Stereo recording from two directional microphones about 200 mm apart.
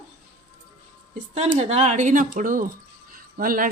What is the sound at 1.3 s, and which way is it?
Speech, 35° right (ahead or behind).